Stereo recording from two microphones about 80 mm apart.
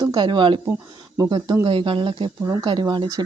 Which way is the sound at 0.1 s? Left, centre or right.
Right.